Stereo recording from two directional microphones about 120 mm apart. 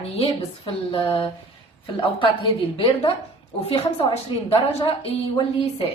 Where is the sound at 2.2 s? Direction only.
45° left (ahead or behind).